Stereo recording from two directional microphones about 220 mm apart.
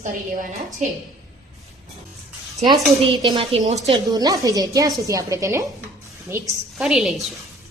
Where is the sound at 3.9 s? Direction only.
20° right (ahead or behind); by 7.3 s centre (ahead or behind).